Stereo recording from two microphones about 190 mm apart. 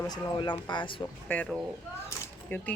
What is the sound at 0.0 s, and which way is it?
Speech, 20° left (ahead or behind).